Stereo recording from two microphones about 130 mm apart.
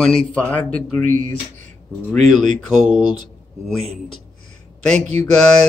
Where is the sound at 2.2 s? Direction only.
65° right (ahead or behind).